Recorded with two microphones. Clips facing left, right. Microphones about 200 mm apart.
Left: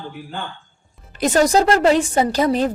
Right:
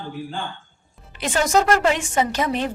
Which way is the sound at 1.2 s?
40° left (ahead or behind).